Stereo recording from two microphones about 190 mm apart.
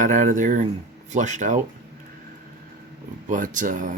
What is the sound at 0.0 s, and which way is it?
Speech, 40° right (ahead or behind).